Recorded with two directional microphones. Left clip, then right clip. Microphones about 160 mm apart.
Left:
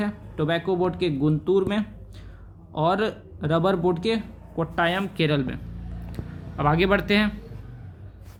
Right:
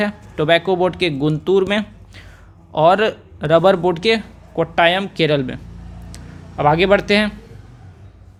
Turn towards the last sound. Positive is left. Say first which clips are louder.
# right 7 dB
turn(degrees=-30)  # may be behind; listen again after turning